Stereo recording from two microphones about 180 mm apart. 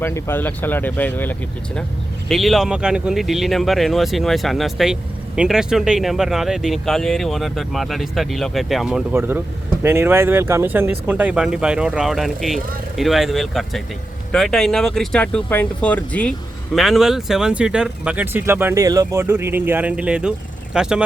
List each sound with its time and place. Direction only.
0.0 s speech: 15° left (ahead or behind)
2.3 s speech: centre (ahead or behind)